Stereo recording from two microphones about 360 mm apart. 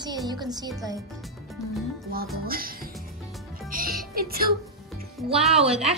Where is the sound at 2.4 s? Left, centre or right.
Right.